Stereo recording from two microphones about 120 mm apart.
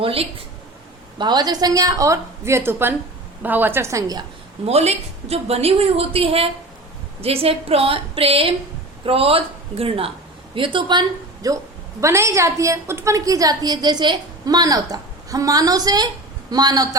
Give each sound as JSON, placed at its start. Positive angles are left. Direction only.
{"t": 0.0, "sound": "speech", "side_deg": -50}
{"t": 1.2, "sound": "a woman's voice", "side_deg": -35}
{"t": 4.6, "sound": "a woman's voice", "side_deg": -60}
{"t": 11.4, "sound": "a woman's voice", "side_deg": -25}